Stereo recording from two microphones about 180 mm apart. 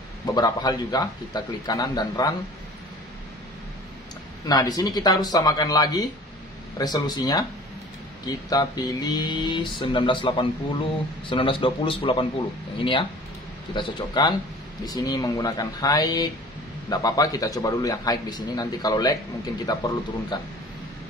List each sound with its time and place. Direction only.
0.3 s speech: 20° left (ahead or behind)
4.5 s speech: 20° left (ahead or behind)
8.5 s speech: 20° left (ahead or behind)
20.3 s speech: 25° left (ahead or behind)